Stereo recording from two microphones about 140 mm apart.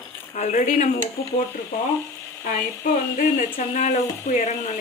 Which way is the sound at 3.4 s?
65° left (ahead or behind).